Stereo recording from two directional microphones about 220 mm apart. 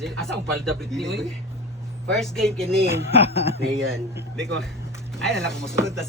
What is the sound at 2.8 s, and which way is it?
Speech, 30° left (ahead or behind).